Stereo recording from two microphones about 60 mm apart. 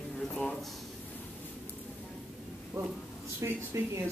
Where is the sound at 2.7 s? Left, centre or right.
Right.